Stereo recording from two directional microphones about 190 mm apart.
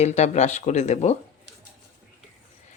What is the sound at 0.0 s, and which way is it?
Speech, 35° left (ahead or behind).